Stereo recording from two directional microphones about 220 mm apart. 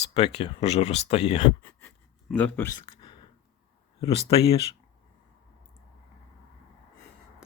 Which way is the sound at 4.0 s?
25° left (ahead or behind).